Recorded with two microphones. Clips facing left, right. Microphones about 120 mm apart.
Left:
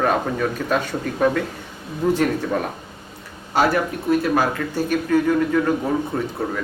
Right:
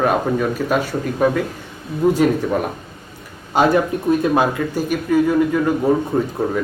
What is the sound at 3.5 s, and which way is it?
Speech, 20° right (ahead or behind).